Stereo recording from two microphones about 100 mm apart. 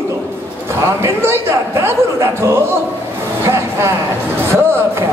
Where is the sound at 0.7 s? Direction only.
25° right (ahead or behind).